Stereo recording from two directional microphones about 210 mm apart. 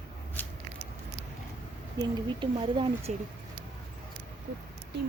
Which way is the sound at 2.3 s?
25° right (ahead or behind).